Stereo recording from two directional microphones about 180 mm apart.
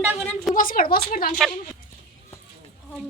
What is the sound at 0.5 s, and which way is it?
Speech, 50° left (ahead or behind).